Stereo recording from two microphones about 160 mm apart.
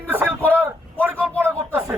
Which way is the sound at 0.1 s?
10° right (ahead or behind).